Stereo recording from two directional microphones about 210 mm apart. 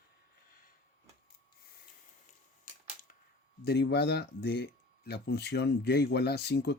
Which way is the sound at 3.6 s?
50° left (ahead or behind).